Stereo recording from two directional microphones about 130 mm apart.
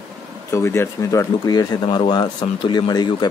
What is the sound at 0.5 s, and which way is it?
Speech, 20° left (ahead or behind).